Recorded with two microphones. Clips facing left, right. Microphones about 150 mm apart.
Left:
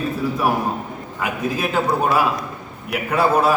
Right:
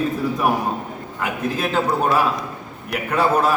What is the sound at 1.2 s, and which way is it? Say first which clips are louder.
A man's voice: even; 5° left (ahead or behind).